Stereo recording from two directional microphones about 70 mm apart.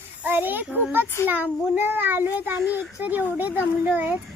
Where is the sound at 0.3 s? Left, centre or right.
Right.